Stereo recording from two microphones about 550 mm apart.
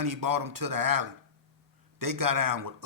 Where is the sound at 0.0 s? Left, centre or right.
Right.